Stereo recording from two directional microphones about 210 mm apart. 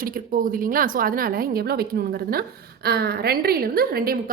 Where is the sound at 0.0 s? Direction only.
40° right (ahead or behind).